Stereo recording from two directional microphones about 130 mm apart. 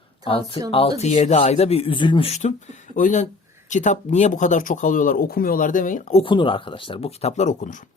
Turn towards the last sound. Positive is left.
turn(degrees=70)  # may be behind; listen again after turning